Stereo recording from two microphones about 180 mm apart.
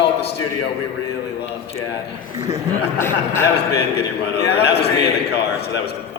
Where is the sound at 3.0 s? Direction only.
15° left (ahead or behind).